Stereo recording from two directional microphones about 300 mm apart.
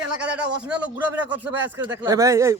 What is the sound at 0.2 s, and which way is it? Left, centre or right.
A man's voice, centre.